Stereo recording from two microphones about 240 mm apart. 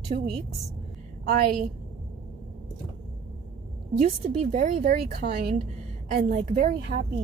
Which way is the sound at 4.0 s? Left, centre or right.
Right.